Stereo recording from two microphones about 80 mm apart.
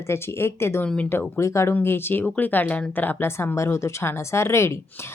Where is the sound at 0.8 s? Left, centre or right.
Centre.